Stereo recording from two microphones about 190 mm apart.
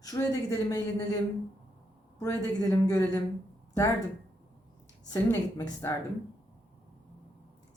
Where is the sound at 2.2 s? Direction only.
15° left (ahead or behind).